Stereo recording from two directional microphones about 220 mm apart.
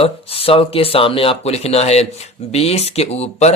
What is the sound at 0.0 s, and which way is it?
Speech, 25° left (ahead or behind).